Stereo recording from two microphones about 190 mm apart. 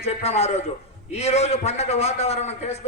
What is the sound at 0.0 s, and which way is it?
A man's voice, 35° left (ahead or behind).